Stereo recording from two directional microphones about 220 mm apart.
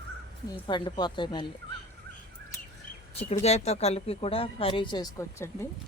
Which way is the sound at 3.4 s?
30° left (ahead or behind).